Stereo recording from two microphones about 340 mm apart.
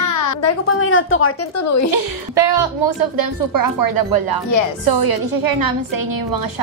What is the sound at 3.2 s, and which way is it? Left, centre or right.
A woman's voice, right.